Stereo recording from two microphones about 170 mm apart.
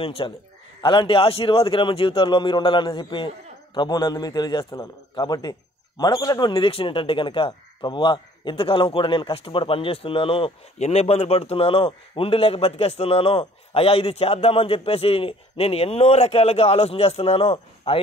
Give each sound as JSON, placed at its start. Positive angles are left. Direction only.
{"t": 0.0, "sound": "a man's voice", "side_deg": 30}